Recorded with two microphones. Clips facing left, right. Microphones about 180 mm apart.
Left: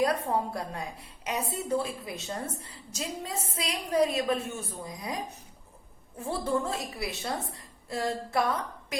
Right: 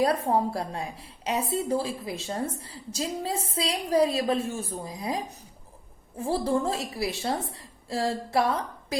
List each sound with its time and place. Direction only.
0.0 s a woman's voice: 30° right (ahead or behind)